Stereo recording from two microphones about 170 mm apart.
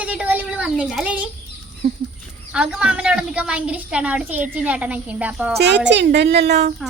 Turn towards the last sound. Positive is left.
turn(degrees=-75)  # may be behind; listen again after turning